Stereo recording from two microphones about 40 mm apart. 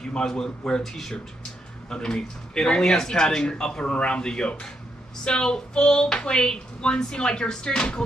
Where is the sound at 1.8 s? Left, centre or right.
Left.